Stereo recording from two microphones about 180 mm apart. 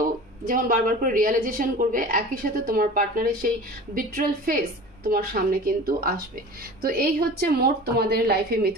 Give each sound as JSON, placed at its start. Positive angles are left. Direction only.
{"t": 0.0, "sound": "a woman's voice", "side_deg": -50}